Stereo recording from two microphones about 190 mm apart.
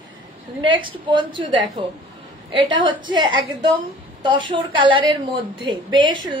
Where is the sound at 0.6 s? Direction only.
25° right (ahead or behind).